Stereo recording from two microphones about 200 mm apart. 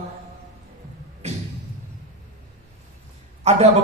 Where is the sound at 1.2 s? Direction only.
35° right (ahead or behind).